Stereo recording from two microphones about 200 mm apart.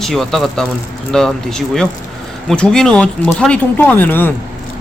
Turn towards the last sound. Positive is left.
turn(degrees=10)  # may be behind; listen again after turning